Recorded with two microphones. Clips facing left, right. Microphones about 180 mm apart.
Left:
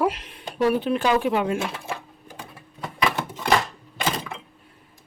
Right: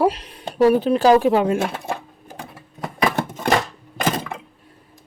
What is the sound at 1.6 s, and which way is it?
Speech, 50° right (ahead or behind).